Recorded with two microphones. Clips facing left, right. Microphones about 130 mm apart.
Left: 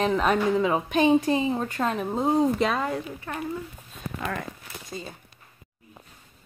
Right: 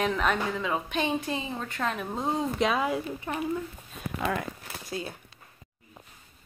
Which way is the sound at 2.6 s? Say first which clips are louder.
Left 1 dB; 5° right (ahead or behind).